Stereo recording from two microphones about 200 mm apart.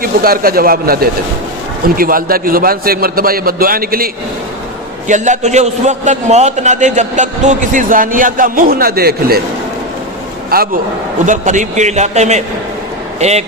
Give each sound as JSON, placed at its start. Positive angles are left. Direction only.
{"t": 0.0, "sound": "a man's voice", "side_deg": -45}
{"t": 10.5, "sound": "a man's voice", "side_deg": -50}
{"t": 11.3, "sound": "a man's voice", "side_deg": -40}